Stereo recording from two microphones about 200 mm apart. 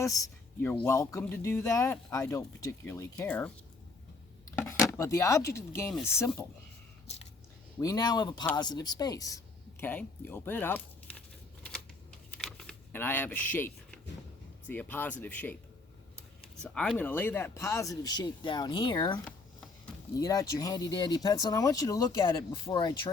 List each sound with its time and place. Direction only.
0.0 s speech: 15° left (ahead or behind)
4.7 s speech: 15° left (ahead or behind)
7.8 s speech: 20° left (ahead or behind)
12.4 s a sound: 5° left (ahead or behind)
14.7 s speech: 10° left (ahead or behind)